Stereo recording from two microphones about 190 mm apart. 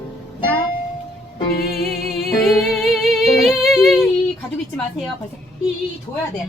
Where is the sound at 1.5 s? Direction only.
50° left (ahead or behind).